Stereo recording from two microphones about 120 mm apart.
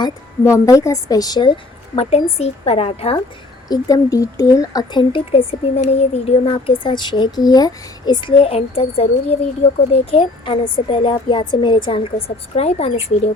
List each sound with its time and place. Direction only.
0.4 s a woman's voice: 25° left (ahead or behind)
2.0 s a woman's voice: 60° left (ahead or behind)
3.7 s speech: 30° left (ahead or behind); by 9.4 s 60° left (ahead or behind)
9.9 s speech: 50° left (ahead or behind)